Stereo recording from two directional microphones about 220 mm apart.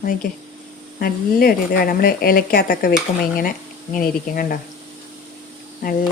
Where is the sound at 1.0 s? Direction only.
40° left (ahead or behind).